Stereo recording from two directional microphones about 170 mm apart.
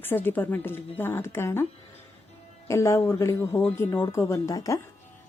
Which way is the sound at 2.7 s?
15° left (ahead or behind).